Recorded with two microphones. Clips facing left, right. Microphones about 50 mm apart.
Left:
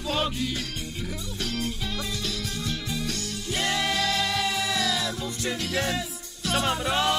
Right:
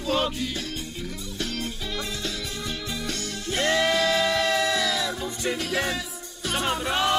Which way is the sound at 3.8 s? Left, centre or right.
Right.